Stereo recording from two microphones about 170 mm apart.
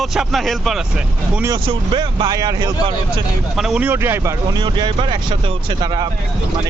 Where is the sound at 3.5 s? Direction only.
5° right (ahead or behind).